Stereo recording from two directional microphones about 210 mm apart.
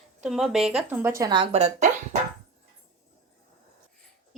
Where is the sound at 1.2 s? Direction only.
20° right (ahead or behind).